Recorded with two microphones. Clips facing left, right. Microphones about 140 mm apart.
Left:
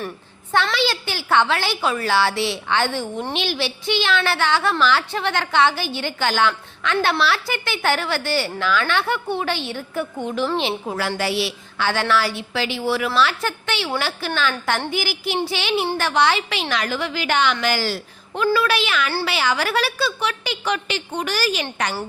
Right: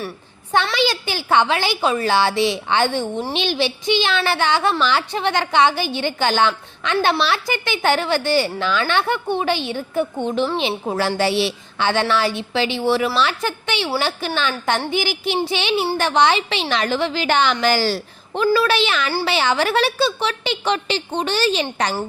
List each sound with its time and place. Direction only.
0.5 s a woman's voice: 15° right (ahead or behind)